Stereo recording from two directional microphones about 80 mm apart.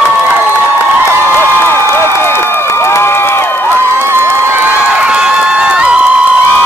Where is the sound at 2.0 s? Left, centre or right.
Left.